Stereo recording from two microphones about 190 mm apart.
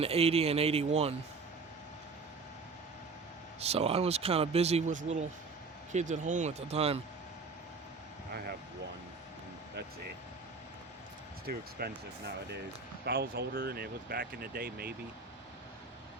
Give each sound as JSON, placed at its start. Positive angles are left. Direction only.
{"t": 0.0, "sound": "speech", "side_deg": -30}
{"t": 3.6, "sound": "speech", "side_deg": -30}
{"t": 11.4, "sound": "speech", "side_deg": -60}